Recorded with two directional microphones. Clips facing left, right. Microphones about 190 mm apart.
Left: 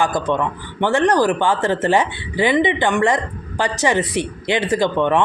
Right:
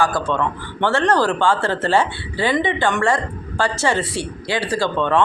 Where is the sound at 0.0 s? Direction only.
20° left (ahead or behind).